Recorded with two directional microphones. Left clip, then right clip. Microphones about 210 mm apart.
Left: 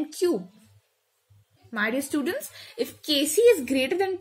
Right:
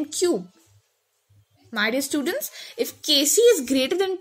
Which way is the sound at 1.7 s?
10° right (ahead or behind).